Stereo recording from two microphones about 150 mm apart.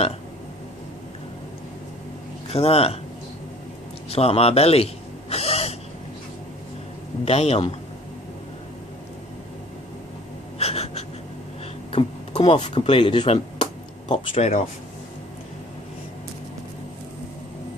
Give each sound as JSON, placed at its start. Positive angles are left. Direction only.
{"t": 2.5, "sound": "speech", "side_deg": 40}
{"t": 4.1, "sound": "gasp", "side_deg": 40}
{"t": 7.2, "sound": "a man's voice", "side_deg": 45}
{"t": 10.6, "sound": "a sound", "side_deg": 45}
{"t": 12.7, "sound": "speech", "side_deg": 35}
{"t": 13.2, "sound": "a sound", "side_deg": 40}